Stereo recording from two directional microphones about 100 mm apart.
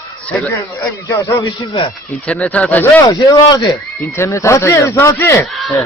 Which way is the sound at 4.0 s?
25° left (ahead or behind).